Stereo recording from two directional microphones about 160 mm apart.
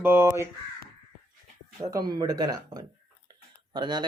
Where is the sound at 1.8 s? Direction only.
25° right (ahead or behind).